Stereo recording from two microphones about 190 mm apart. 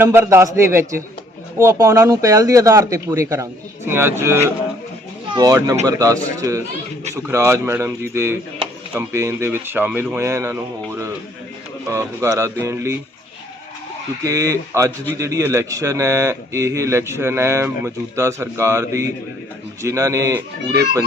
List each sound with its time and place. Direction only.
0.0 s a man's voice: 10° right (ahead or behind)
11.9 s a man's voice: 15° right (ahead or behind)
14.3 s a man's voice: 15° right (ahead or behind)